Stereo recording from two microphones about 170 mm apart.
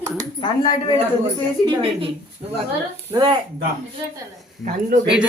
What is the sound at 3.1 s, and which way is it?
Speech, 25° right (ahead or behind).